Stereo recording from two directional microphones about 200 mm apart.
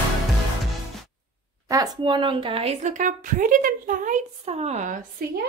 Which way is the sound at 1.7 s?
20° right (ahead or behind).